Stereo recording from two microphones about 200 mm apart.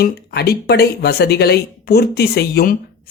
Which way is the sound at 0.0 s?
55° left (ahead or behind).